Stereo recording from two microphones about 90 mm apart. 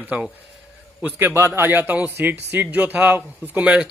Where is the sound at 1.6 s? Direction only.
20° right (ahead or behind).